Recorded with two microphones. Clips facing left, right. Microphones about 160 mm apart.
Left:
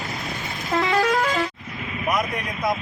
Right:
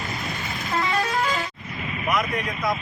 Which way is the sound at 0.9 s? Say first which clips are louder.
Left 8 dB; 90° left.